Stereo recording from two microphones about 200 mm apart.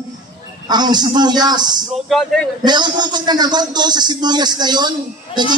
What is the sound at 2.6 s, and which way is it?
Speech, 20° right (ahead or behind).